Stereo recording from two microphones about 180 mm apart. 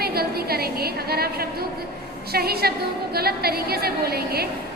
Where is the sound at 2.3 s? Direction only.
60° right (ahead or behind).